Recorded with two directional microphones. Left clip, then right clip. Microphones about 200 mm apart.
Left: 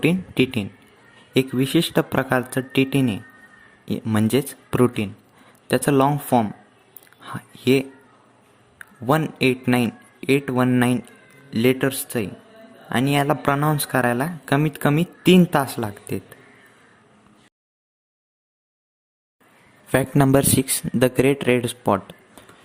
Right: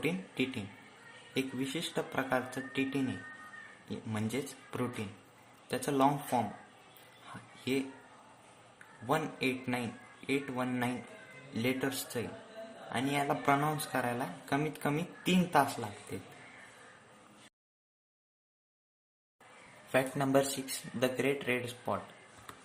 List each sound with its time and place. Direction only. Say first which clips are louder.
0.0 s speech: left 14 dB; 50° left (ahead or behind)
9.0 s speech: left 13 dB; 45° left (ahead or behind)
19.9 s speech: left 11 dB; 50° left (ahead or behind)